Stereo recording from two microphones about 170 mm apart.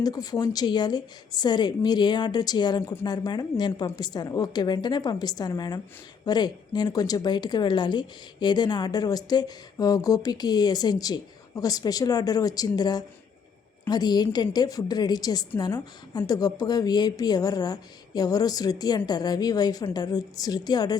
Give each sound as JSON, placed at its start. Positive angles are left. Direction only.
{"t": 0.0, "sound": "a woman's voice", "side_deg": 20}